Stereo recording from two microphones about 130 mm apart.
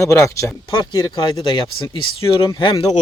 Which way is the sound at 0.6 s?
35° left (ahead or behind).